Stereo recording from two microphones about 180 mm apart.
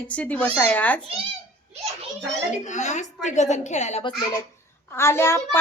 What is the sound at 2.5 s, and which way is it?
Speech, 40° left (ahead or behind).